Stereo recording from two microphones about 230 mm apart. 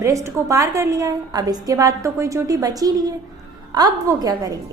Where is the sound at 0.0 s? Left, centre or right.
Centre.